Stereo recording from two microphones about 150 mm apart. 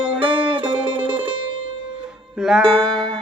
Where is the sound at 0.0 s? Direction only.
35° right (ahead or behind).